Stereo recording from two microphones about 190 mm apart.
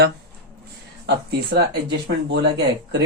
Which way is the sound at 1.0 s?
60° right (ahead or behind).